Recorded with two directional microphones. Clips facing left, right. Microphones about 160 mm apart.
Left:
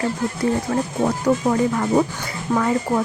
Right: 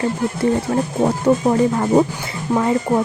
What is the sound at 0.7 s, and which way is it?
Speech, 25° right (ahead or behind).